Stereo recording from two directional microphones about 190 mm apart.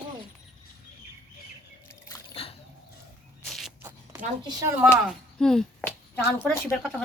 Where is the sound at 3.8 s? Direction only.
15° right (ahead or behind).